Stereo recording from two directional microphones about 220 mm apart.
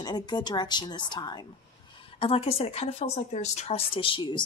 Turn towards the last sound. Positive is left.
turn(degrees=20)  # may be behind; listen again after turning